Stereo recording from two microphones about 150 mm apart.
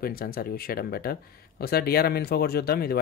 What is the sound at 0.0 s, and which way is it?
Speech, 80° left.